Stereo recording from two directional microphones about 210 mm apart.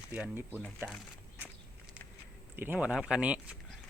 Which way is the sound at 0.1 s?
10° right (ahead or behind).